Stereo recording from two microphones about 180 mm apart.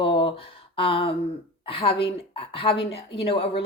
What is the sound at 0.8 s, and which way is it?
A woman's voice, 30° left (ahead or behind).